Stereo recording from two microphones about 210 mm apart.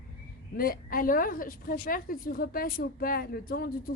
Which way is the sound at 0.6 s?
45° left (ahead or behind).